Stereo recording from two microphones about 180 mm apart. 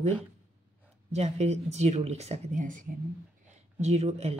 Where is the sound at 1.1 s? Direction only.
35° right (ahead or behind).